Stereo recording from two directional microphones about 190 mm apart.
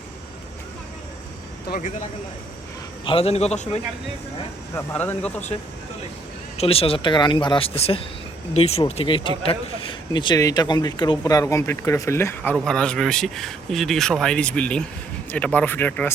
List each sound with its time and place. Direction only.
1.7 s a man's voice: 40° left (ahead or behind)
3.0 s a man's voice: 30° left (ahead or behind)
4.7 s speech: 10° left (ahead or behind)
6.6 s speech: 30° left (ahead or behind); by 16.1 s 10° left (ahead or behind)